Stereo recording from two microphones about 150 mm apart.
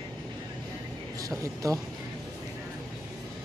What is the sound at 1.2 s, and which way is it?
Speech, 20° right (ahead or behind).